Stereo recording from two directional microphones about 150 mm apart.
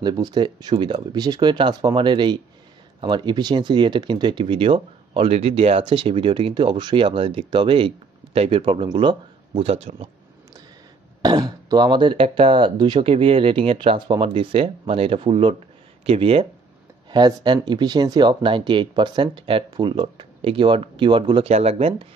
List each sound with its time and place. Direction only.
0.0 s speech: 30° right (ahead or behind); by 10.0 s 45° right (ahead or behind)
11.2 s speech: 25° right (ahead or behind)